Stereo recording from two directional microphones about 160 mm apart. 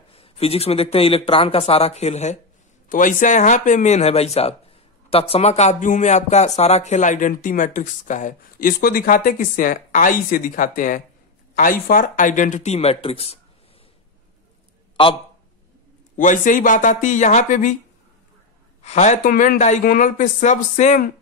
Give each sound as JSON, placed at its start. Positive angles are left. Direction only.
{"t": 0.1, "sound": "speech", "side_deg": 35}
{"t": 2.9, "sound": "speech", "side_deg": 55}
{"t": 16.2, "sound": "speech", "side_deg": 55}
{"t": 18.8, "sound": "speech", "side_deg": 45}